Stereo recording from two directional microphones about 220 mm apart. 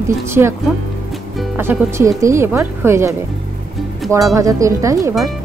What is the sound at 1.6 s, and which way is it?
Speech, 10° right (ahead or behind).